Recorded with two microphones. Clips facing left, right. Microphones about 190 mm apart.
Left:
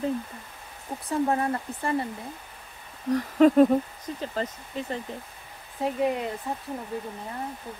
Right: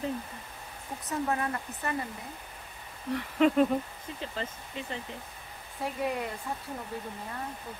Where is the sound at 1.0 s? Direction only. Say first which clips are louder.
Left 6 dB; 30° left (ahead or behind).